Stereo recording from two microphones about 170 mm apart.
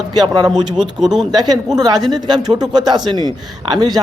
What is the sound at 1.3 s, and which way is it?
Speech, 25° right (ahead or behind).